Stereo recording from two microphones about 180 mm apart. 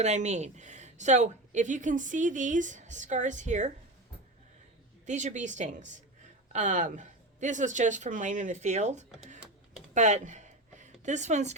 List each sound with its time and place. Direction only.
0.0 s a woman's voice: 40° right (ahead or behind)
5.0 s a woman's voice: 40° right (ahead or behind)
9.9 s a sound: 40° right (ahead or behind)